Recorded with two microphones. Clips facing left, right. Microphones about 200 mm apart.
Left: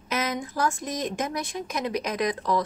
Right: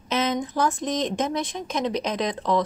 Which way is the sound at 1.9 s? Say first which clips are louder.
Right 2 dB; 5° left (ahead or behind).